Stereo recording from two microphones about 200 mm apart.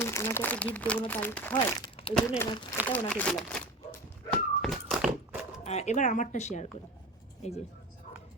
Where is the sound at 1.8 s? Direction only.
25° left (ahead or behind).